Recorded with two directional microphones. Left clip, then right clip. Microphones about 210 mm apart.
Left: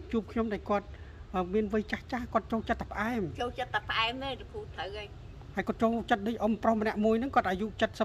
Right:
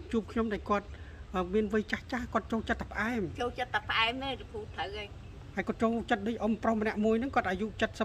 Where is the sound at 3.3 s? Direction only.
Centre (ahead or behind).